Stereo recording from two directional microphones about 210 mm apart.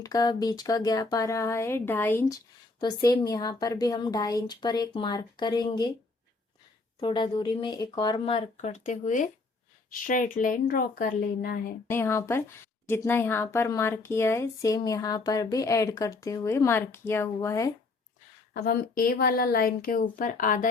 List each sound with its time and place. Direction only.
0.0 s a woman's voice: 20° left (ahead or behind)
7.0 s a woman's voice: 20° left (ahead or behind); by 11.6 s 45° left (ahead or behind)
11.9 s speech: 10° left (ahead or behind)
18.5 s speech: 45° left (ahead or behind)